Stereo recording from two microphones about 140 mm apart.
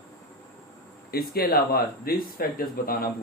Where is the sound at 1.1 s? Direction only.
90° left.